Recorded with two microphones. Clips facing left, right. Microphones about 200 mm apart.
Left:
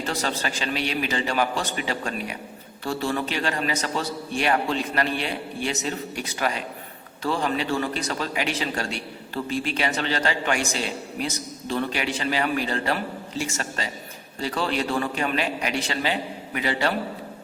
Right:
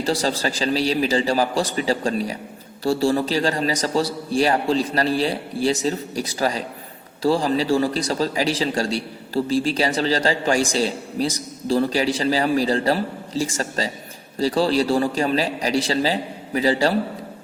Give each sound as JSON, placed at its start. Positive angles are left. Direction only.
{"t": 0.0, "sound": "a man's voice", "side_deg": -35}